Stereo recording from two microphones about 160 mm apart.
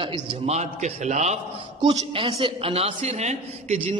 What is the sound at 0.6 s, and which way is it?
Speech, 45° right (ahead or behind).